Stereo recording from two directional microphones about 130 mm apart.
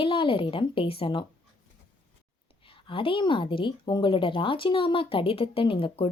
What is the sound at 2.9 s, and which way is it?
Speech, 40° left (ahead or behind).